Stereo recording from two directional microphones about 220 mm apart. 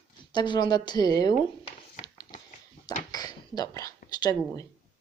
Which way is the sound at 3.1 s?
15° left (ahead or behind).